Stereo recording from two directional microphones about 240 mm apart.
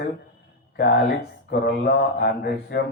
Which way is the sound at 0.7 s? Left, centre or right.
Left.